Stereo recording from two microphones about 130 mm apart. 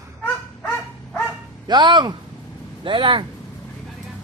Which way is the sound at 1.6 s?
35° right (ahead or behind).